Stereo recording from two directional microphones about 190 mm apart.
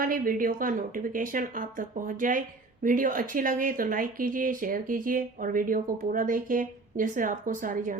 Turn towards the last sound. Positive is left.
turn(degrees=-45)  # may be behind; listen again after turning